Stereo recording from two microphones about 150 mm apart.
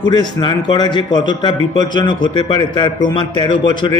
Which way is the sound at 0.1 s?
30° left (ahead or behind).